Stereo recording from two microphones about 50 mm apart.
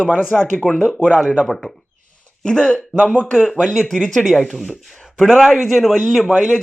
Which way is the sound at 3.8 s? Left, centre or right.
Centre.